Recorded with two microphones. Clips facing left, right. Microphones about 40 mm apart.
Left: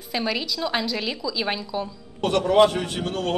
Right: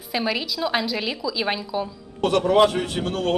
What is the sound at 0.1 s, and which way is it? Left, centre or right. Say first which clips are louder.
A woman's voice: right 1 dB; centre.